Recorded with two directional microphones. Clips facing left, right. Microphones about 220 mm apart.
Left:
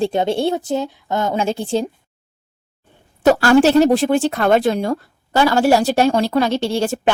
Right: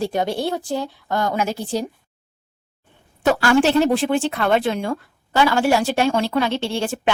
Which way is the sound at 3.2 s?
40° left (ahead or behind).